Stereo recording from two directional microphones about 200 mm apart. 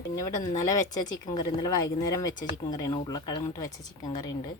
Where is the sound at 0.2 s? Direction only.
15° left (ahead or behind).